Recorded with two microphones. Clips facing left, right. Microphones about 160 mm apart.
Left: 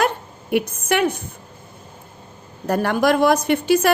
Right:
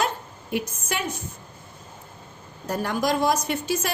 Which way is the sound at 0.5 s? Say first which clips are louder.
Left 8 dB; 65° left (ahead or behind).